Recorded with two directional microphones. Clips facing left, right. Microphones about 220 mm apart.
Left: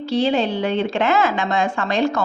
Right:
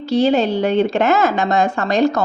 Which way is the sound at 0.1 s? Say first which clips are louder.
Right 4 dB; 45° right (ahead or behind).